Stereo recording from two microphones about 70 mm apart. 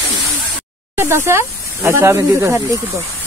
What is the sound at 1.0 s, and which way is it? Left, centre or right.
Speech, right.